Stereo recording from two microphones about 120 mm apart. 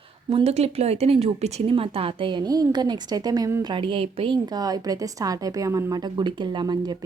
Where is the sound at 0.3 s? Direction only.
60° right (ahead or behind).